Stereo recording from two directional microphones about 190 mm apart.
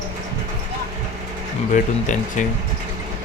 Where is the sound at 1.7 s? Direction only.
40° left (ahead or behind).